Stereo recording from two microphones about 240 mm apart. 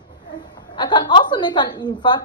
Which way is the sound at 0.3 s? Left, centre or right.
Centre.